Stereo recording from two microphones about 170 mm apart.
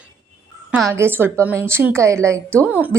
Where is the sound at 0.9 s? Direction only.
15° right (ahead or behind).